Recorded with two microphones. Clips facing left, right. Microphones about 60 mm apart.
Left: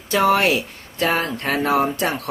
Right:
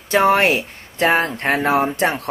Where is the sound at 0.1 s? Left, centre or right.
Right.